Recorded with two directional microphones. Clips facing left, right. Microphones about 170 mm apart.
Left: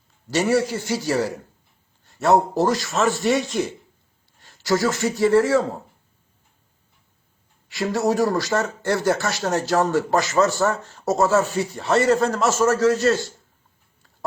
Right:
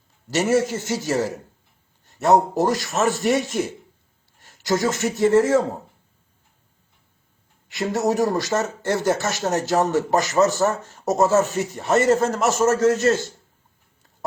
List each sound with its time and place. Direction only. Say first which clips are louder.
0.3 s speech: even; 20° right (ahead or behind)
2.0 s a sound: right 1 dB; 20° right (ahead or behind)
2.6 s speech: even; 20° right (ahead or behind)
7.7 s speech: even; 20° right (ahead or behind)